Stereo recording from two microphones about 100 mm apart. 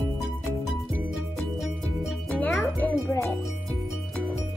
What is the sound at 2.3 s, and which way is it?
Music, 15° left (ahead or behind).